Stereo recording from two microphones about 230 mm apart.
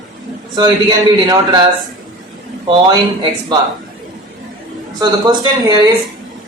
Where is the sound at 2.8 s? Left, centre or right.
Centre.